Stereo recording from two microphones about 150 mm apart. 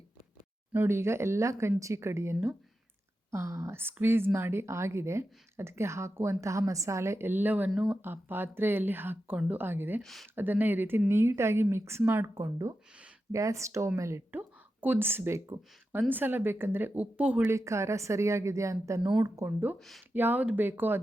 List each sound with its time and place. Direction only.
0.7 s speech: 15° right (ahead or behind)
8.0 s speech: 15° right (ahead or behind)
10.0 s speech: centre (ahead or behind)
10.3 s a woman's voice: 10° right (ahead or behind)